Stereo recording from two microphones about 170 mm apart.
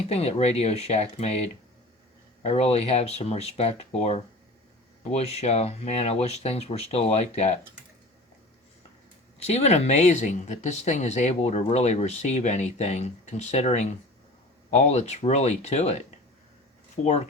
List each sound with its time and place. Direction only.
0.1 s speech: 40° left (ahead or behind)
9.4 s speech: 40° left (ahead or behind)
17.0 s speech: 45° left (ahead or behind)